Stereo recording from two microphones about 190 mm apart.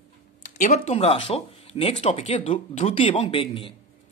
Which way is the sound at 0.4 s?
40° left (ahead or behind).